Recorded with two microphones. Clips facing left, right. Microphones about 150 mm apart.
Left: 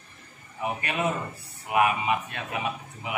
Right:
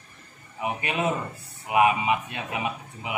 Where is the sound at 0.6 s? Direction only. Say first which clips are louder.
Right 1 dB; 20° right (ahead or behind).